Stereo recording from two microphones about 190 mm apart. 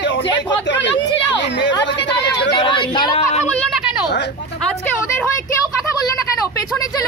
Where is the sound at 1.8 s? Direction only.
65° left (ahead or behind).